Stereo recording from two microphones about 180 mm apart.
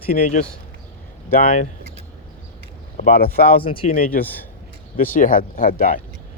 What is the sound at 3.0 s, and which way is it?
Speech, 55° left (ahead or behind).